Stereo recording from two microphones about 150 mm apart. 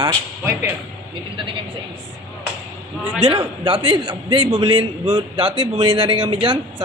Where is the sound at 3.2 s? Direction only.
35° right (ahead or behind).